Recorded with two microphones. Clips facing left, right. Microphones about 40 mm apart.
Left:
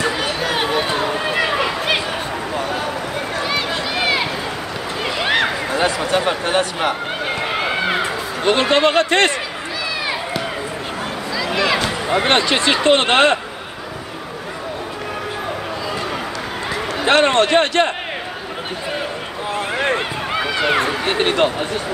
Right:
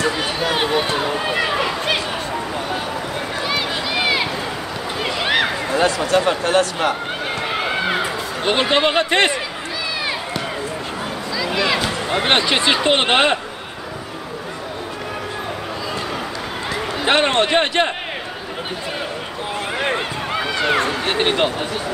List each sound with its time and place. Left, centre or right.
0.2 s a sound: centre
0.7 s chatter: centre
3.5 s run: centre
5.0 s a sound: centre
5.8 s speech: centre
7.4 s run: centre
8.5 s a man's voice: centre
12.3 s a man's voice: centre
17.0 s a man's voice: centre
19.8 s run: centre
21.2 s a man's voice: centre